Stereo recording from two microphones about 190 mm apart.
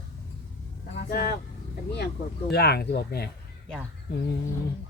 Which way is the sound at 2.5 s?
60° left (ahead or behind).